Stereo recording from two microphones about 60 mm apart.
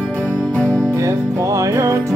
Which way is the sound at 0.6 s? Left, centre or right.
Centre.